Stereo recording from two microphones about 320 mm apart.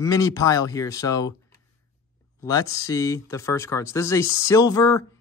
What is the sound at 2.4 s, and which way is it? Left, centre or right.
Speech, centre.